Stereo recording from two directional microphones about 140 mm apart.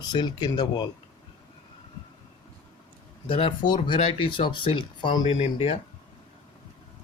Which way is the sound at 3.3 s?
40° left (ahead or behind).